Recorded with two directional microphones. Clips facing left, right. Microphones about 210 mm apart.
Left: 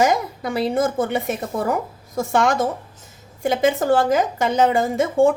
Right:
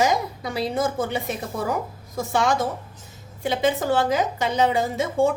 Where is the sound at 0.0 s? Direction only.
55° left (ahead or behind).